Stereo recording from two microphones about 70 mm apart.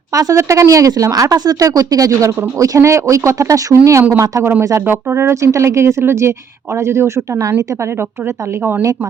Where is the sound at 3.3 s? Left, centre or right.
Right.